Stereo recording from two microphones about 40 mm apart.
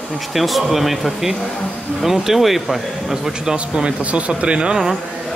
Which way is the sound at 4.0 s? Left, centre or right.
Right.